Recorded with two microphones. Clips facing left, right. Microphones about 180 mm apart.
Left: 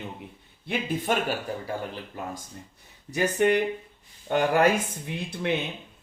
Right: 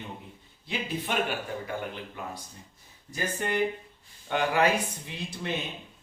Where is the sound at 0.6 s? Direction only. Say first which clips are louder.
Left 4 dB; 55° left (ahead or behind).